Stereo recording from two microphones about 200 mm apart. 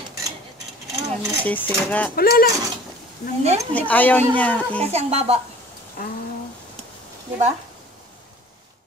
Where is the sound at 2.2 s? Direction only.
50° left (ahead or behind).